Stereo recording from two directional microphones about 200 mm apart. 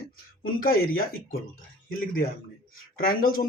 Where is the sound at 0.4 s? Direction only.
45° left (ahead or behind).